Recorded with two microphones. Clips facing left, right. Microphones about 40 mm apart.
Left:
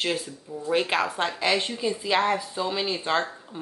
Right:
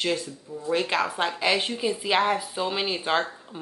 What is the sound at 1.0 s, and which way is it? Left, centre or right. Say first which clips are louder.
A woman's voice: even; centre.